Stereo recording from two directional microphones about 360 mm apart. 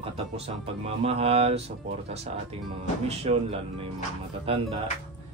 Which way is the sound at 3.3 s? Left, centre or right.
Centre.